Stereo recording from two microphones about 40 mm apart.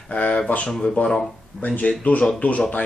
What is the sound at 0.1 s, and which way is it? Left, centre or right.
Speech, left.